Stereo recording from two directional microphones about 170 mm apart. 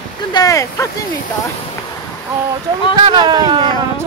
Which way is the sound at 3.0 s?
25° right (ahead or behind).